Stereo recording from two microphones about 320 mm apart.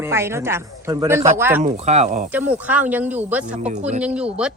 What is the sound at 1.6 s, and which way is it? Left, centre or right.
Speech, right.